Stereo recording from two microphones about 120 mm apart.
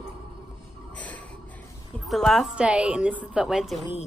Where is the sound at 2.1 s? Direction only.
Centre (ahead or behind).